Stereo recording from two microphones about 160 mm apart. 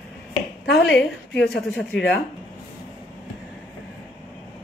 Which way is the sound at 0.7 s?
90° left.